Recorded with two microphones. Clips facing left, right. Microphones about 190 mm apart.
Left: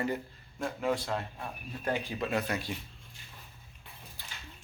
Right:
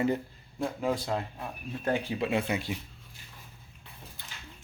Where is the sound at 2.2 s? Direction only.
25° right (ahead or behind).